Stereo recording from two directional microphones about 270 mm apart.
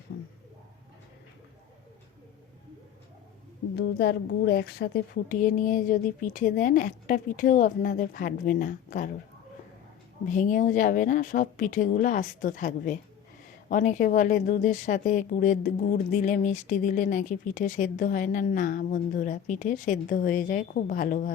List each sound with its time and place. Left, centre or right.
0.1 s a sound: left
3.8 s a woman's voice: left
10.2 s speech: left